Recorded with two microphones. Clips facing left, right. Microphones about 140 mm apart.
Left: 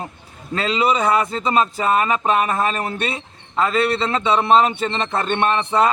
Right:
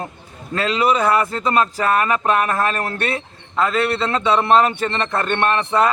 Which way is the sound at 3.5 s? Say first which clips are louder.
Even; centre (ahead or behind).